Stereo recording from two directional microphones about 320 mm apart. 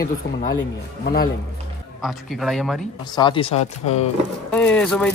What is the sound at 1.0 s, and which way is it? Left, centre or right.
Speech, left.